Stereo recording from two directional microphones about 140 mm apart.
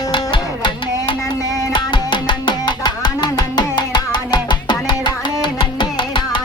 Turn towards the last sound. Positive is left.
turn(degrees=35)  # may be behind; listen again after turning